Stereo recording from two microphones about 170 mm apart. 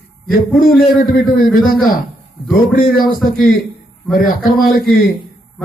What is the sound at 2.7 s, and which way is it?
A man's voice, 60° left (ahead or behind).